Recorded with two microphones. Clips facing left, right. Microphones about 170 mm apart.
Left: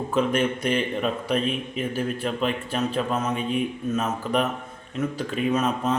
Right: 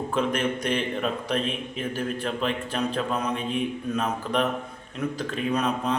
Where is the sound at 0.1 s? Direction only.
5° left (ahead or behind).